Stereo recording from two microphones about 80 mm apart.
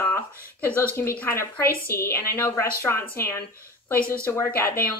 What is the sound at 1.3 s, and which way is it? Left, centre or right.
A woman's voice, left.